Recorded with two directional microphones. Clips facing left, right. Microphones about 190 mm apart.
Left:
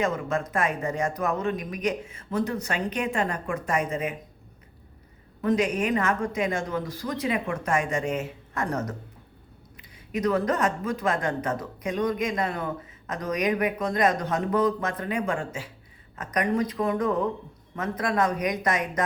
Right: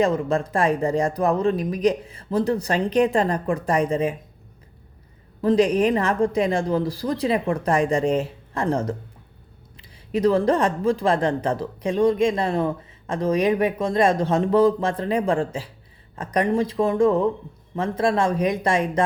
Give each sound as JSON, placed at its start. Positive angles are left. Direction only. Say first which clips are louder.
{"t": 0.0, "sound": "speech", "louder": "right 6 dB", "side_deg": -35}
{"t": 5.4, "sound": "speech", "louder": "right 6 dB", "side_deg": -30}